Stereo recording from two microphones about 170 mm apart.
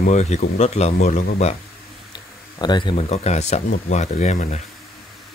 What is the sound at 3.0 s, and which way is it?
Speech, 40° left (ahead or behind).